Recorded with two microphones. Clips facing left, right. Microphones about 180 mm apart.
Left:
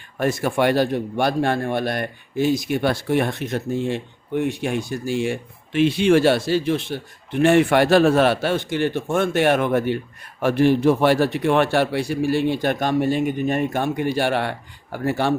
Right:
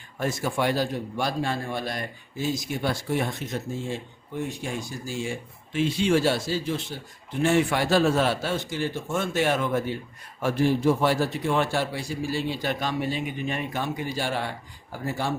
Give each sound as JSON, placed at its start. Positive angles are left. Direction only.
{"t": 0.2, "sound": "speech", "side_deg": 65}